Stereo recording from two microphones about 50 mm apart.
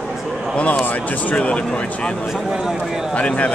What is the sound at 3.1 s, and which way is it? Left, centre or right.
Speech, left.